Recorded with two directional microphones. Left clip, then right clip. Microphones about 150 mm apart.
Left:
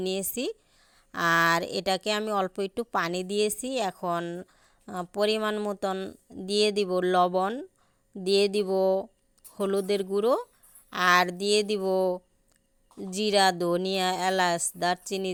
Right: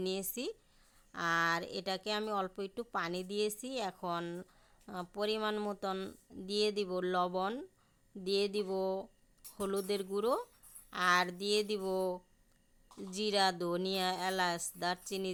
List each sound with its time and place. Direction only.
0.0 s speech: 40° left (ahead or behind)
1.1 s speech: 50° left (ahead or behind); by 4.4 s 30° left (ahead or behind)
4.9 s speech: 40° left (ahead or behind)
6.4 s speech: 40° left (ahead or behind)
8.2 s speech: 45° left (ahead or behind)
10.9 s speech: 45° left (ahead or behind)